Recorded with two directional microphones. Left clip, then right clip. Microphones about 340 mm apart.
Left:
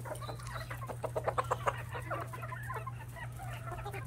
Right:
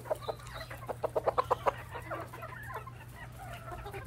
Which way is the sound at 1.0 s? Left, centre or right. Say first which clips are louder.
Right 4 dB; centre.